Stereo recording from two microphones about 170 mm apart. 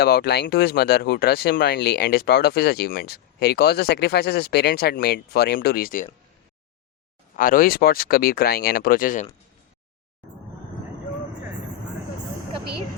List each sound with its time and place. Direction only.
0.0 s speech: 65° left (ahead or behind)
7.3 s speech: 55° left (ahead or behind)